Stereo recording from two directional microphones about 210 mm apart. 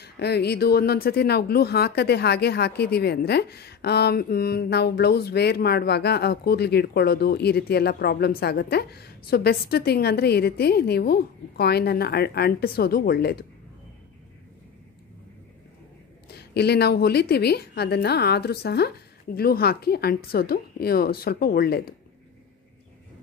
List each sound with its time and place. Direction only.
0.0 s speech: 50° left (ahead or behind)
16.3 s speech: 50° left (ahead or behind)